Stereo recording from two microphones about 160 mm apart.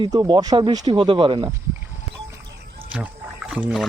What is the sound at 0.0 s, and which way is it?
Speech, 25° right (ahead or behind).